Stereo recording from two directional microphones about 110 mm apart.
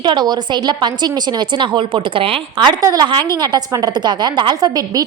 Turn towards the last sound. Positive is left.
turn(degrees=-40)  # may be behind; listen again after turning